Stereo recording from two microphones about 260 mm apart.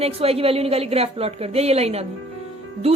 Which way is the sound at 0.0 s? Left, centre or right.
Right.